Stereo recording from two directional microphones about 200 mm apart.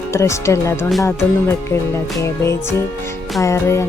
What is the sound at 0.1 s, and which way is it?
Music, 15° left (ahead or behind).